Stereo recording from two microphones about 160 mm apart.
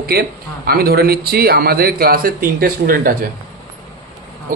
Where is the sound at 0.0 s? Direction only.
75° right (ahead or behind).